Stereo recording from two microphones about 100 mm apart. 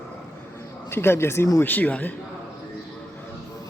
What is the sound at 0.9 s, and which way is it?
A man's voice, 25° left (ahead or behind).